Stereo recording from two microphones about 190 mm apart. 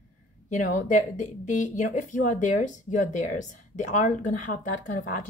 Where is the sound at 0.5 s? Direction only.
40° left (ahead or behind).